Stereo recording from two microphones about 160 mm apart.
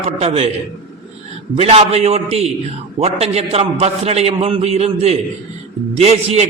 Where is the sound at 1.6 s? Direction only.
40° right (ahead or behind).